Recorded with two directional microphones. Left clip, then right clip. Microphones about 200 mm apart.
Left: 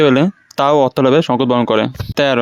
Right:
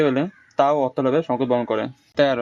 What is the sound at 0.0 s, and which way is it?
Speech, 50° left (ahead or behind).